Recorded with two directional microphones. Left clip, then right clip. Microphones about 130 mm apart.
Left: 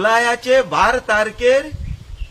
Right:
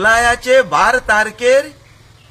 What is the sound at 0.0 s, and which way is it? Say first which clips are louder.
A man's voice: right 3 dB; 25° right (ahead or behind).